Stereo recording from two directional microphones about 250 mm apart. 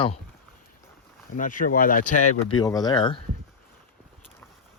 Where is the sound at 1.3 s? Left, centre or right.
Left.